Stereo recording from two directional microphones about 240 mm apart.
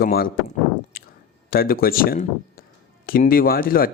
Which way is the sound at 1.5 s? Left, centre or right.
Left.